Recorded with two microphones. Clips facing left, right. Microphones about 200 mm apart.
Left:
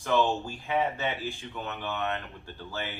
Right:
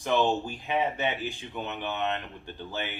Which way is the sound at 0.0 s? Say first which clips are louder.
Right 1 dB; 20° right (ahead or behind).